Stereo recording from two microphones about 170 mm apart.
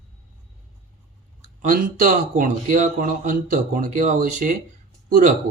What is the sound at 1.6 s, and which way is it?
A man's voice, 50° right (ahead or behind).